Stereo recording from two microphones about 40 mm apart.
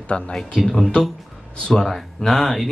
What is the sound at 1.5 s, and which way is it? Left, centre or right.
Speech, centre.